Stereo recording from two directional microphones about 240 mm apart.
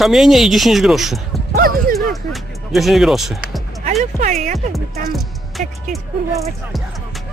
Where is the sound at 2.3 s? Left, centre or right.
Centre.